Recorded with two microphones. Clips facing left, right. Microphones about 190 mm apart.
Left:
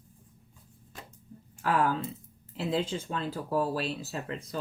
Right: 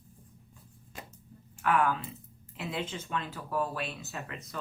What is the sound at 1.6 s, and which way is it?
Speech, 35° left (ahead or behind).